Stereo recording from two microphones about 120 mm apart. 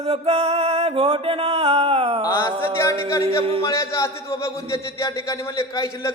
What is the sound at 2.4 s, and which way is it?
A man's voice, 25° left (ahead or behind).